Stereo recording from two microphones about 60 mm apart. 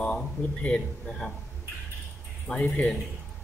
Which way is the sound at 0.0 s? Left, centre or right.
Left.